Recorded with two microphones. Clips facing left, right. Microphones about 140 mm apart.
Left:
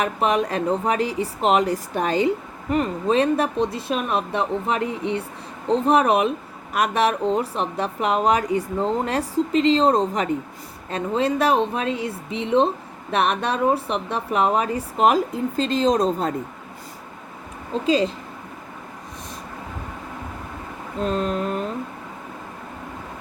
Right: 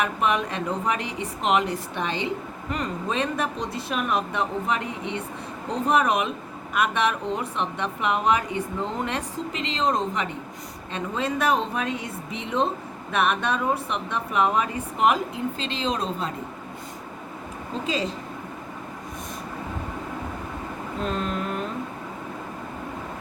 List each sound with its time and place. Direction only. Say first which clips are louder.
0.0 s a woman's voice: left 3 dB; 35° left (ahead or behind)
2.7 s a woman's voice: left 8 dB; 30° left (ahead or behind)
21.0 s a woman's voice: left 5 dB; 35° left (ahead or behind)